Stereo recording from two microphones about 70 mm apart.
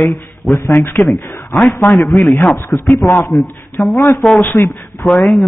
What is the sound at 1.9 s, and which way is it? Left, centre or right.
Speech, left.